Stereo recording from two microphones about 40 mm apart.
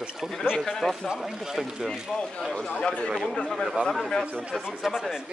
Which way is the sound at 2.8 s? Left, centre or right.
Left.